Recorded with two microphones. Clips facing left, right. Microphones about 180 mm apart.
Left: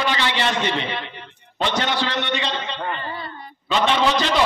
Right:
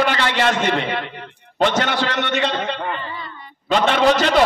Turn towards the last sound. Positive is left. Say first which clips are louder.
# right 4 dB
turn(degrees=-50)  # may be behind; listen again after turning